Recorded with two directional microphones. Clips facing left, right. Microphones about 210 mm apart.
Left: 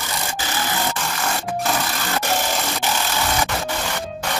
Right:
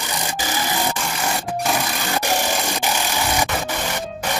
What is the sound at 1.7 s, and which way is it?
Wood, 15° right (ahead or behind).